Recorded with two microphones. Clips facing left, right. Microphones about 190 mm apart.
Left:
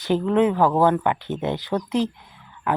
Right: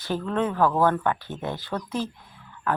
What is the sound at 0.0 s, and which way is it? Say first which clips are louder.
Speech: left 7 dB; 15° left (ahead or behind).